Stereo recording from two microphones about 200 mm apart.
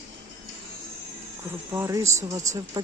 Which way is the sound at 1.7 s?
15° right (ahead or behind).